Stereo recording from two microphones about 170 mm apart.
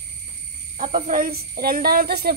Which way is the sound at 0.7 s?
40° right (ahead or behind).